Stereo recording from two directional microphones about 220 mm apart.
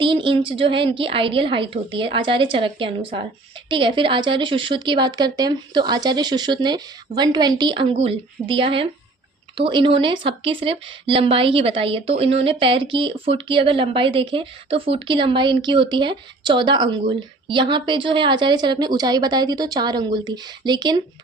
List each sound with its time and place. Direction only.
0.0 s speech: 20° right (ahead or behind)